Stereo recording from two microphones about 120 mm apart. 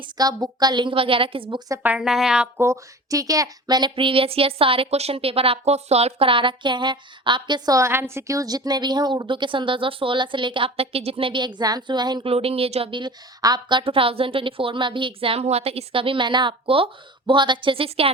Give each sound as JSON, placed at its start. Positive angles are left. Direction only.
{"t": 0.2, "sound": "a woman's voice", "side_deg": -35}
{"t": 1.5, "sound": "a woman's voice", "side_deg": -30}
{"t": 1.8, "sound": "a woman's voice", "side_deg": -10}
{"t": 2.6, "sound": "a woman's voice", "side_deg": -25}
{"t": 12.3, "sound": "speech", "side_deg": -55}